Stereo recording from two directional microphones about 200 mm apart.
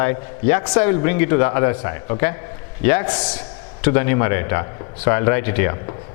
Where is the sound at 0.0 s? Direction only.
15° left (ahead or behind).